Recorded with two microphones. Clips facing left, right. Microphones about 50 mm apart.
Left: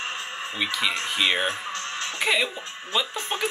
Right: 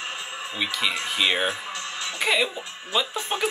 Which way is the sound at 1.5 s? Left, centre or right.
Left.